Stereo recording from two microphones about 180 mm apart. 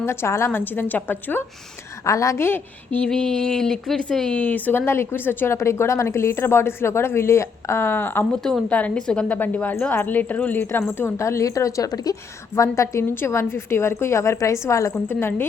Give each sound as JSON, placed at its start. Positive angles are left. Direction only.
{"t": 0.0, "sound": "a woman's voice", "side_deg": 15}